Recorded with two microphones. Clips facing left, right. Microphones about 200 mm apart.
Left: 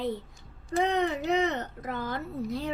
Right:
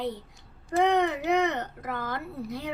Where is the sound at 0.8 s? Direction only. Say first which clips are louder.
Right 3 dB; 60° right (ahead or behind).